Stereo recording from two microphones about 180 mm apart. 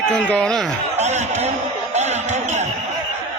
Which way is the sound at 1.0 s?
40° right (ahead or behind).